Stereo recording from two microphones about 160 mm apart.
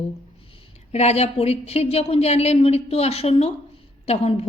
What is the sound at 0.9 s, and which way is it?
A woman's voice, 40° left (ahead or behind).